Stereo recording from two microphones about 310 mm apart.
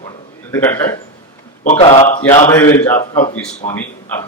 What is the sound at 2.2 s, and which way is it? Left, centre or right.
Speech, centre.